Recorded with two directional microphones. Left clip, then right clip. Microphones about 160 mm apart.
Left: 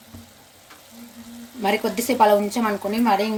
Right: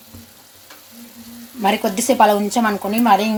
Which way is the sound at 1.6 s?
55° right (ahead or behind).